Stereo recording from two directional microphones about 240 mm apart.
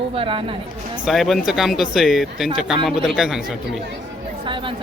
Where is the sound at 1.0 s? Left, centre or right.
Centre.